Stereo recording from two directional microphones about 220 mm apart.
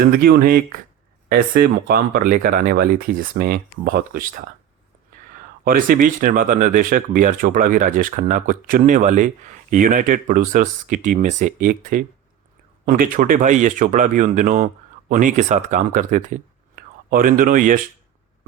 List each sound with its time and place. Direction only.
0.0 s speech: 45° right (ahead or behind)
5.6 s speech: 40° right (ahead or behind)